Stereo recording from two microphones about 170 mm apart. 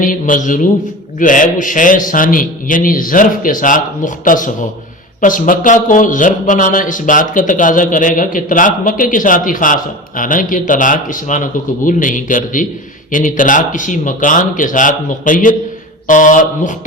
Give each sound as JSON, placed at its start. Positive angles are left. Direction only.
{"t": 0.0, "sound": "speech", "side_deg": 50}